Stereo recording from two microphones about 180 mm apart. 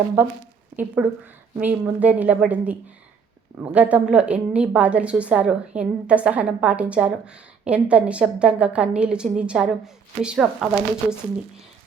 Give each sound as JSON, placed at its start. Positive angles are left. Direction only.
{"t": 0.2, "sound": "a woman's voice", "side_deg": -10}